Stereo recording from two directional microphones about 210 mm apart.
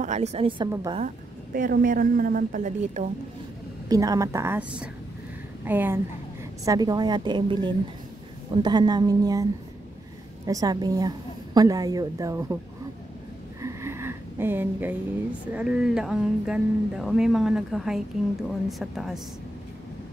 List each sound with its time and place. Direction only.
0.0 s a woman's voice: 35° right (ahead or behind)
0.9 s a woman's voice: 40° right (ahead or behind)
3.9 s a woman's voice: 15° right (ahead or behind)
13.6 s a sound: 15° right (ahead or behind)
15.4 s speech: 5° right (ahead or behind)